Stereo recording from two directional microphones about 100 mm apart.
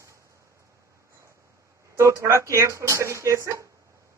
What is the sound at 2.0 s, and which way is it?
Speech, 30° right (ahead or behind).